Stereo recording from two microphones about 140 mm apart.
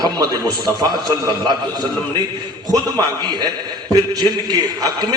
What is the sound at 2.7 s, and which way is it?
A man's voice, 30° right (ahead or behind).